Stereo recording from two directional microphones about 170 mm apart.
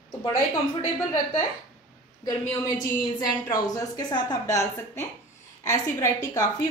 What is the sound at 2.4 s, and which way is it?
A woman's voice, 20° left (ahead or behind).